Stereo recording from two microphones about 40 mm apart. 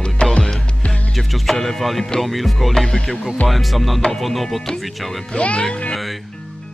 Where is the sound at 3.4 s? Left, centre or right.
Centre.